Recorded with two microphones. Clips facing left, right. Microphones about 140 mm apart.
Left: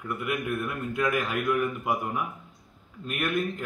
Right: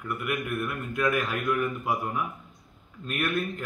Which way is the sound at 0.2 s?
20° left (ahead or behind).